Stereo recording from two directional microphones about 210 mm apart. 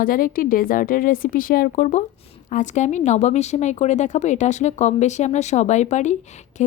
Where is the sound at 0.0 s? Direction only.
40° left (ahead or behind).